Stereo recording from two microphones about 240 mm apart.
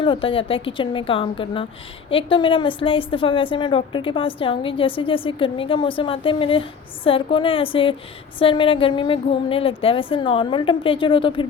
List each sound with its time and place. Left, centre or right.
0.0 s a woman's voice: left